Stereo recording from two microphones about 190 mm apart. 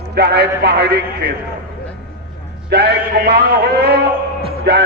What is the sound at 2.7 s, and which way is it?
A man's voice, 60° right (ahead or behind).